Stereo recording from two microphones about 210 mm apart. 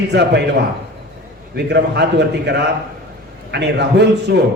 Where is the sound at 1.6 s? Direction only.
50° right (ahead or behind).